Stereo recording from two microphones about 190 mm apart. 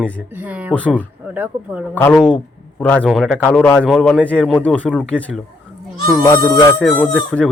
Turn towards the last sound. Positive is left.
turn(degrees=5)  # may be behind; listen again after turning